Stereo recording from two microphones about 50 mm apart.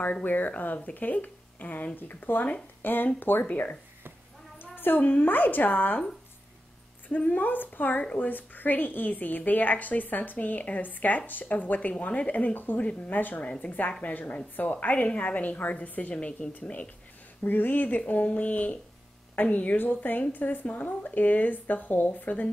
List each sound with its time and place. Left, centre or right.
0.1 s a woman's voice: left
7.1 s a woman's voice: left
8.0 s a woman's voice: left
8.3 s a woman's voice: left
13.4 s a woman's voice: left
17.4 s a woman's voice: left